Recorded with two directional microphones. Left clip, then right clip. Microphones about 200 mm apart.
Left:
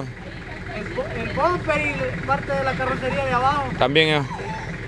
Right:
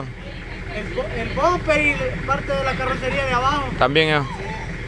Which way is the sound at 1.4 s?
20° right (ahead or behind).